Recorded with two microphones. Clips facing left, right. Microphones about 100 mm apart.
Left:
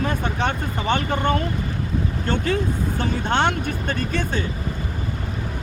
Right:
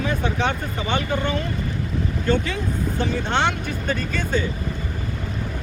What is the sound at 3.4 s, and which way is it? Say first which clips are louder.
Speech: left 2 dB; 50° left (ahead or behind).